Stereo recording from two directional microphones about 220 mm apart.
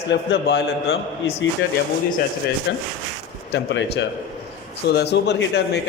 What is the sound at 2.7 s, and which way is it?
A man's voice, 55° left (ahead or behind).